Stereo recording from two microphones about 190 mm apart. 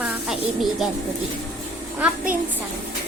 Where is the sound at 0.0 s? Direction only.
Centre (ahead or behind).